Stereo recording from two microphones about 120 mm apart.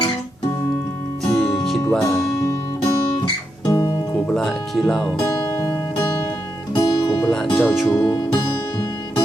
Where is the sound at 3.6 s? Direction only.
35° left (ahead or behind).